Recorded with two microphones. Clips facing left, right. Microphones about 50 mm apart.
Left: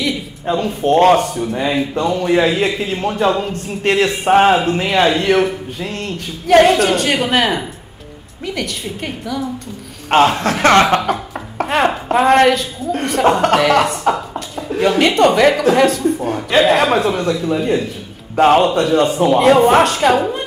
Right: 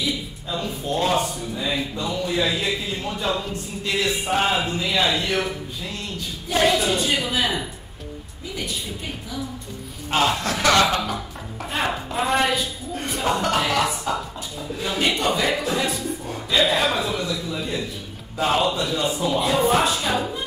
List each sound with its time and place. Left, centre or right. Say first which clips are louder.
0.0 s a man's voice: left 7 dB; left
10.1 s speech: left 9 dB; left
11.1 s a sound: left 9 dB; left
12.1 s a woman's voice: left 11 dB; left
14.1 s a sound: left 5 dB; left
14.8 s a woman's voice: left 11 dB; left
16.0 s a man's voice: left 11 dB; left